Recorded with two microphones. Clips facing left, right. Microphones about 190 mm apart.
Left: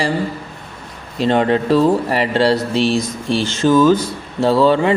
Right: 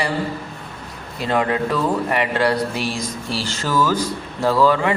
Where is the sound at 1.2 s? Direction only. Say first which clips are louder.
Left 5 dB; 30° left (ahead or behind).